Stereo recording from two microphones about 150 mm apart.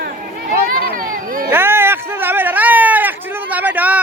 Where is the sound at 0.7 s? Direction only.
65° right (ahead or behind).